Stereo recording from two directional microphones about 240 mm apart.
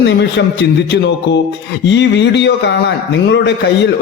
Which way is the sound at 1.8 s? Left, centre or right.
Left.